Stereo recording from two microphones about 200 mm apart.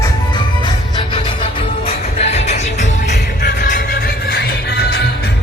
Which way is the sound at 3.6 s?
40° left (ahead or behind).